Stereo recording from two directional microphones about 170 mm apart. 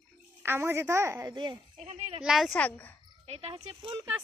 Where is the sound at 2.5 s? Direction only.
10° left (ahead or behind).